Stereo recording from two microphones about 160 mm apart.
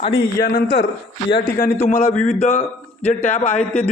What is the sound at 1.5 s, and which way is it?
Speech, 60° left (ahead or behind).